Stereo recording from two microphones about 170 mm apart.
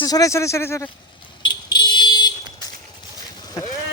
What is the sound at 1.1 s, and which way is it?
Vehicle, 30° left (ahead or behind).